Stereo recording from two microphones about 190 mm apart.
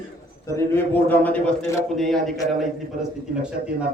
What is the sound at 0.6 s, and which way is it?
A man's voice, 10° left (ahead or behind).